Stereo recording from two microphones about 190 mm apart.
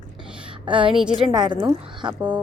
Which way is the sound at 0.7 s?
25° right (ahead or behind).